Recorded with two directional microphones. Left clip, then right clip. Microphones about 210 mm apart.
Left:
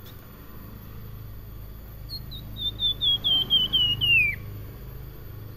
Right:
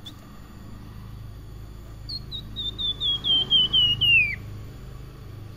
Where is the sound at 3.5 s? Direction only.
25° right (ahead or behind).